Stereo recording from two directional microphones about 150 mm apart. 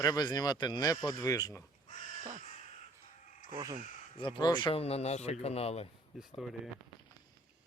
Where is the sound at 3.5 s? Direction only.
30° right (ahead or behind).